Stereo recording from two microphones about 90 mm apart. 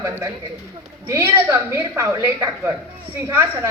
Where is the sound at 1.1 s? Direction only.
30° right (ahead or behind).